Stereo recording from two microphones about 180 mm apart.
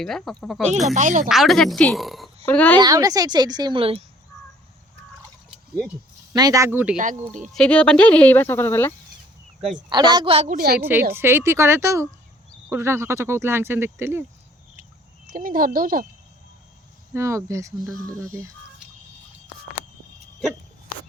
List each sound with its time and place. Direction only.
0.0 s a woman's voice: centre (ahead or behind)
0.9 s speech: 45° right (ahead or behind)
1.3 s a woman's voice: centre (ahead or behind)
2.7 s a woman's voice: 20° right (ahead or behind)
6.3 s speech: 20° right (ahead or behind)
6.9 s speech: 45° right (ahead or behind)
7.5 s speech: 5° left (ahead or behind)
9.9 s a woman's voice: 25° right (ahead or behind)
10.8 s speech: 10° right (ahead or behind)
15.3 s speech: 50° right (ahead or behind)
17.2 s speech: 15° right (ahead or behind)